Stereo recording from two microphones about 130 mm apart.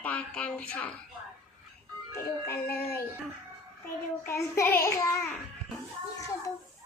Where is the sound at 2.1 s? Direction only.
20° left (ahead or behind).